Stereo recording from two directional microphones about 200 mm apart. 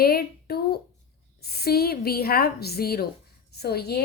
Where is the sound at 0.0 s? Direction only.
50° left (ahead or behind).